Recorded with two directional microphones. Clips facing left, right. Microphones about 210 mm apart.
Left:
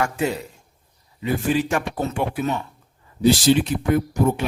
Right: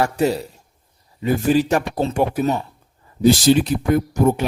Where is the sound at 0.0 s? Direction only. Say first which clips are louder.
Right 4 dB; 35° right (ahead or behind).